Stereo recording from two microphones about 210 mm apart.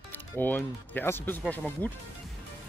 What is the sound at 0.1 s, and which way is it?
Speech, 10° left (ahead or behind).